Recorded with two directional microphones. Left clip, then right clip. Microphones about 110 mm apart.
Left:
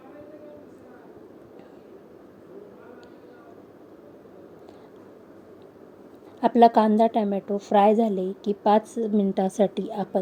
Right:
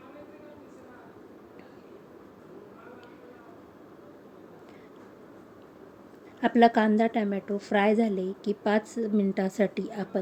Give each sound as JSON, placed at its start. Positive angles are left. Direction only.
{"t": 6.4, "sound": "a woman's voice", "side_deg": 40}